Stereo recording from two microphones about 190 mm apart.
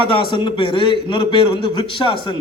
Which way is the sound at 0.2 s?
25° left (ahead or behind).